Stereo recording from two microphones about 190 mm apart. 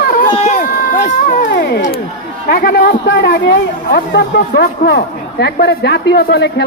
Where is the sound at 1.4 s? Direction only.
65° left (ahead or behind).